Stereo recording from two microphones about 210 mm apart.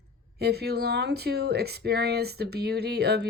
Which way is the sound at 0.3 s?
50° right (ahead or behind).